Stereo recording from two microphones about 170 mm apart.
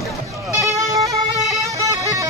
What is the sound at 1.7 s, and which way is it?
Bagpipes, 20° right (ahead or behind).